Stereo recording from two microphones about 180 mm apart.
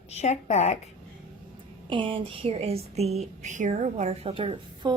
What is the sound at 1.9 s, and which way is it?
Speech, 25° right (ahead or behind).